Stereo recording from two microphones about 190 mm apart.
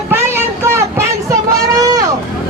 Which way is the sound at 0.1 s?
15° right (ahead or behind).